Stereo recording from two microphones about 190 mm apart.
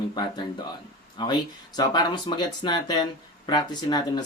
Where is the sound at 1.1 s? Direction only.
20° left (ahead or behind).